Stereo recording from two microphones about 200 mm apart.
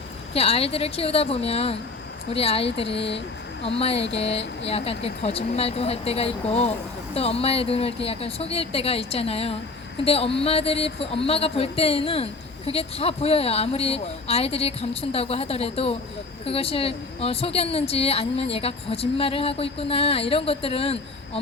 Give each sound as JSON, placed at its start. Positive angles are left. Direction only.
{"t": 0.3, "sound": "speech", "side_deg": 30}